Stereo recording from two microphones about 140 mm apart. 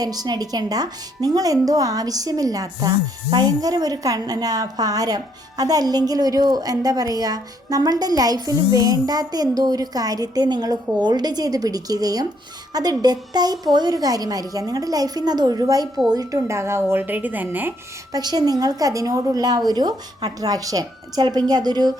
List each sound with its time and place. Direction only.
0.0 s a woman's voice: 25° right (ahead or behind)
18.1 s a woman's voice: 30° right (ahead or behind)